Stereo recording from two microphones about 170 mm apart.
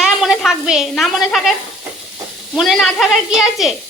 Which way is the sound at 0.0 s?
Centre (ahead or behind).